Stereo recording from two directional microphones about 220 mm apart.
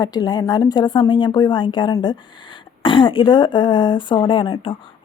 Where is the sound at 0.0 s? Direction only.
20° left (ahead or behind).